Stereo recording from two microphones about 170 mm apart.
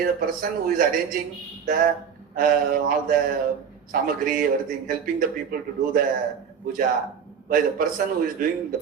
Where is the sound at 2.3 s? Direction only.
55° right (ahead or behind).